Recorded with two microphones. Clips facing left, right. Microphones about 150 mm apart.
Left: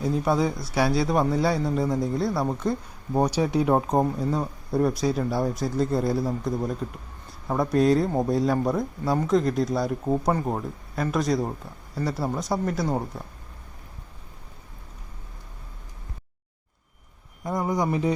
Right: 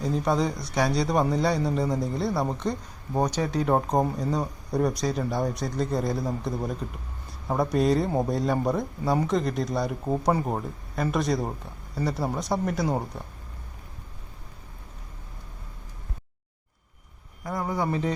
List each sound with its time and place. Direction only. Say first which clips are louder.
0.0 s speech: left 2 dB; 5° left (ahead or behind)
17.4 s speech: left 3 dB; 20° left (ahead or behind)